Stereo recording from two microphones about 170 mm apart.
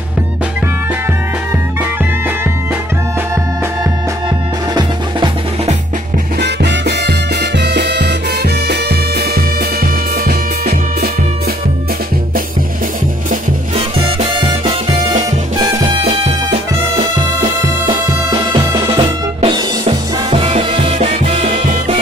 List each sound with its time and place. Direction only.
1.8 s music: 10° right (ahead or behind)
6.4 s music: 80° right
13.7 s music: 35° right (ahead or behind)
16.0 s music: 35° right (ahead or behind)
17.8 s music: 20° right (ahead or behind)
18.8 s music: 30° right (ahead or behind)